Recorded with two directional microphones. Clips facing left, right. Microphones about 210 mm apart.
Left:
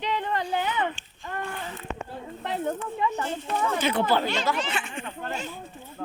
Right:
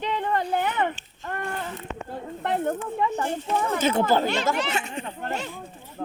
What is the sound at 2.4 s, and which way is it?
Snake, 55° right (ahead or behind).